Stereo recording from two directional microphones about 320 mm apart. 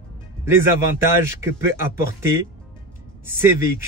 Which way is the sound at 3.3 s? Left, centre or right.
Centre.